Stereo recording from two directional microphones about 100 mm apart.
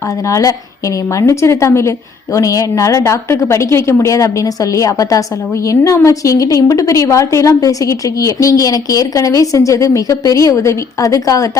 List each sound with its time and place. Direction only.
0.3 s a woman's voice: 35° left (ahead or behind)